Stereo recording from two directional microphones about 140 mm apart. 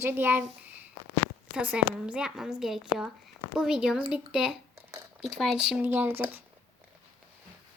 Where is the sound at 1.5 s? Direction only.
10° right (ahead or behind).